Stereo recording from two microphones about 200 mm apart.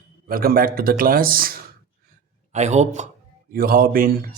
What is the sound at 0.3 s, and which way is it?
Speech, 45° right (ahead or behind).